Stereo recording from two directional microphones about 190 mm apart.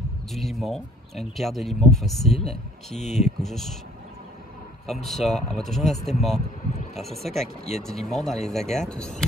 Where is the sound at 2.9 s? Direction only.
35° left (ahead or behind).